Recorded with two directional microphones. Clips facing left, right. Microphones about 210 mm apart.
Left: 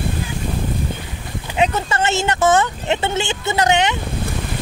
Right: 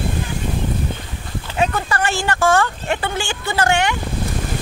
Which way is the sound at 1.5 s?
20° left (ahead or behind).